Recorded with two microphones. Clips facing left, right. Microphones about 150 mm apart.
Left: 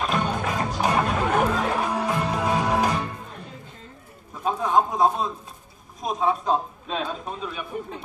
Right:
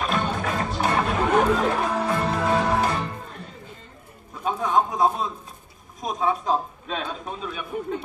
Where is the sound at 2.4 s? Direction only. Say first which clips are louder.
Even; 15° left (ahead or behind).